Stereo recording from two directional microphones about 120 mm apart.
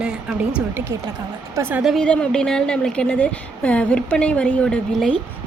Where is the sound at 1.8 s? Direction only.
5° left (ahead or behind).